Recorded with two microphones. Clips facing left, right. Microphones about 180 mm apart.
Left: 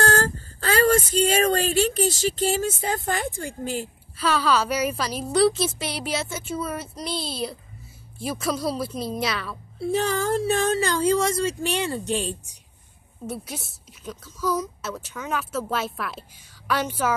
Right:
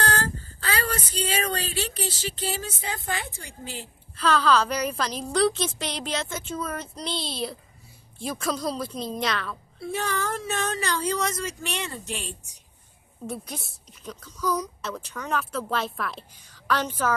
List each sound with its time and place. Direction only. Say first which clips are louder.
0.0 s speech: left 5 dB; 45° left (ahead or behind)
4.2 s a woman's voice: right 1 dB; 10° left (ahead or behind)
9.8 s speech: left 6 dB; 30° left (ahead or behind)
13.3 s a woman's voice: left 2 dB; 5° left (ahead or behind)